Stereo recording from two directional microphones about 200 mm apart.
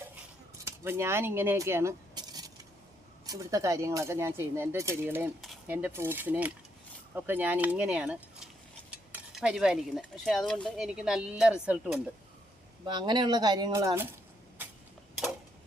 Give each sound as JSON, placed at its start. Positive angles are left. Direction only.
{"t": 0.6, "sound": "speech", "side_deg": -10}
{"t": 12.8, "sound": "speech", "side_deg": -20}